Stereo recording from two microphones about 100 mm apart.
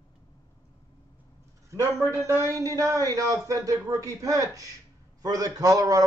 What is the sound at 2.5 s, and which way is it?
A man's voice, 35° right (ahead or behind).